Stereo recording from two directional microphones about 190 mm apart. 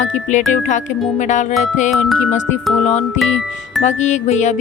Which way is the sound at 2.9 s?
40° left (ahead or behind).